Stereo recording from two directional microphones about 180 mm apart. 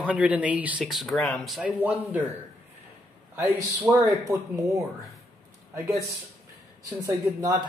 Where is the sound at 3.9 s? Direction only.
5° right (ahead or behind).